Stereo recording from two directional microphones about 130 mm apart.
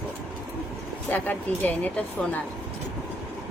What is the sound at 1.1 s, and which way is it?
A woman's voice, 15° left (ahead or behind).